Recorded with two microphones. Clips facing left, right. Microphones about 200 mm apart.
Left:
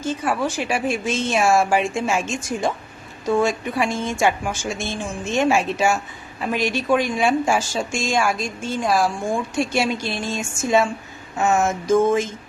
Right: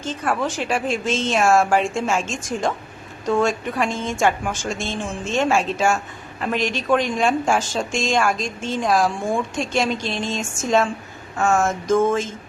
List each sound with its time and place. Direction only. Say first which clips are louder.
0.0 s a woman's voice: left 1 dB; 5° left (ahead or behind)